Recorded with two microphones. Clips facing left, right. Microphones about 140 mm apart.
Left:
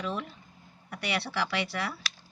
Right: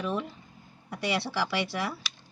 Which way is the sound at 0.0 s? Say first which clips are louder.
Right 3 dB; 20° right (ahead or behind).